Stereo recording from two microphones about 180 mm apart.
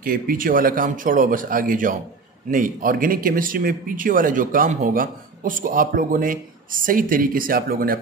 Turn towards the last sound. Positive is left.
turn(degrees=-55)  # may be behind; listen again after turning